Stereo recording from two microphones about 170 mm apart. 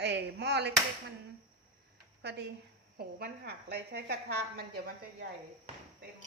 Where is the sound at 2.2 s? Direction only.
85° right.